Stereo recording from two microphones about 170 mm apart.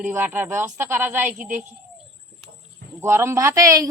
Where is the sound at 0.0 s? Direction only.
10° right (ahead or behind).